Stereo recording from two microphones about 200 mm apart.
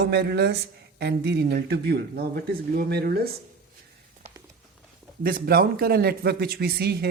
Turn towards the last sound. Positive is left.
turn(degrees=-50)  # may be behind; listen again after turning